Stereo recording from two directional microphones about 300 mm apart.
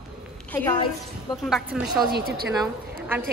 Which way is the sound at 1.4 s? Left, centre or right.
Centre.